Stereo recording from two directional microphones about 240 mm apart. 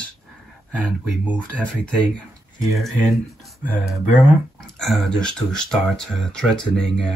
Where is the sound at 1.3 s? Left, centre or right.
Centre.